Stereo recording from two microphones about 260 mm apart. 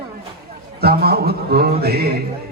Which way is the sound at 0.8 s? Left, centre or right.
Right.